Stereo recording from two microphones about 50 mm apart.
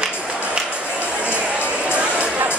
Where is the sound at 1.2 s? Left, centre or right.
Right.